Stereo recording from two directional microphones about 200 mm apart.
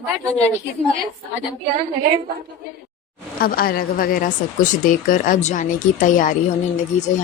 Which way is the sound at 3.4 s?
45° left (ahead or behind).